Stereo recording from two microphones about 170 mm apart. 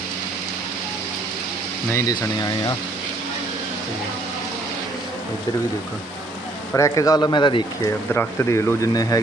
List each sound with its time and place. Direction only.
1.9 s speech: 20° left (ahead or behind)
6.7 s speech: 20° left (ahead or behind)
8.1 s speech: 15° left (ahead or behind)